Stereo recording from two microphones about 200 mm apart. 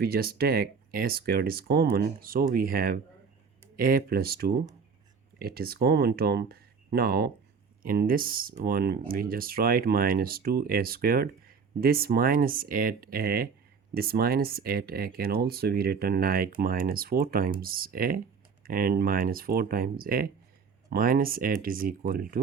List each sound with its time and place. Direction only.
0.0 s speech: 50° right (ahead or behind)